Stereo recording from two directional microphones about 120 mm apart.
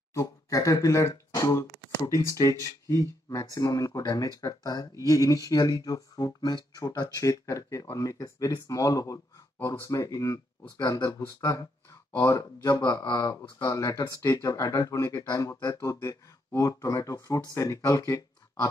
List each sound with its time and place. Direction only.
0.1 s speech: 25° left (ahead or behind)